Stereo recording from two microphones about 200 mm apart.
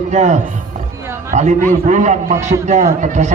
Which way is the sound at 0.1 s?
35° right (ahead or behind).